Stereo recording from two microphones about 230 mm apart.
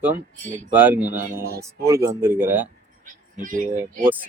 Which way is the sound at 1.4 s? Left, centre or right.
Right.